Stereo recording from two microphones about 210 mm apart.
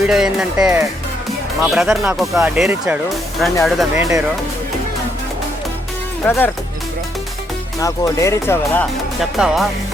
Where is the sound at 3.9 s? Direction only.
15° right (ahead or behind).